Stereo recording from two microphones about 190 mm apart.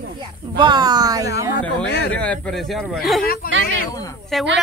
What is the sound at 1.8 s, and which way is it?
Speech, 65° left (ahead or behind).